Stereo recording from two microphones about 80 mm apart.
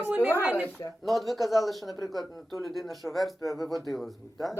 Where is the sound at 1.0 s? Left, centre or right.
Centre.